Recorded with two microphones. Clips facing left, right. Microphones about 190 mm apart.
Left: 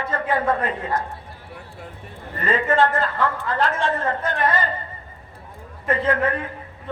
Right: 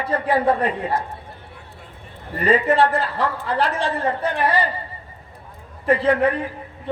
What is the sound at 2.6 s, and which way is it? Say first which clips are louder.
A woman's voice: right 1 dB; 35° right (ahead or behind).